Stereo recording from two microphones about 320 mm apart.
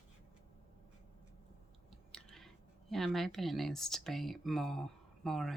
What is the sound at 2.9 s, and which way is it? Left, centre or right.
Speech, centre.